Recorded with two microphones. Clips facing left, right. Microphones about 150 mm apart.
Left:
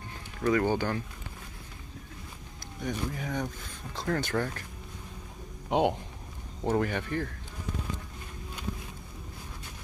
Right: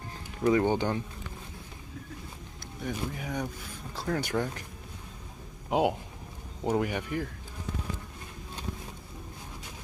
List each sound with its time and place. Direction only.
0.5 s speech: 20° right (ahead or behind)
2.8 s speech: 5° right (ahead or behind)
5.7 s a man's voice: 5° right (ahead or behind)